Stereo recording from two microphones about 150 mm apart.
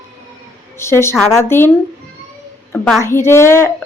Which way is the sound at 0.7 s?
15° left (ahead or behind).